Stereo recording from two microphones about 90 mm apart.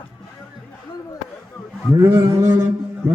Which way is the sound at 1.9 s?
35° right (ahead or behind).